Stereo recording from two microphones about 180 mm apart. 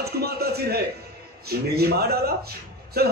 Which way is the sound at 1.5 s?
60° right (ahead or behind).